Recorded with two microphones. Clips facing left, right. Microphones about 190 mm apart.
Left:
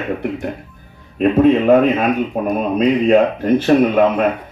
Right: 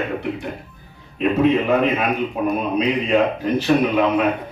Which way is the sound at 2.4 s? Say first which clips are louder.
Left 3 dB; 55° left (ahead or behind).